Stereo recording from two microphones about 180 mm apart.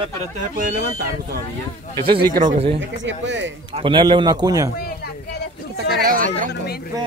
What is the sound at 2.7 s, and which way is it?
Speech, 90° right.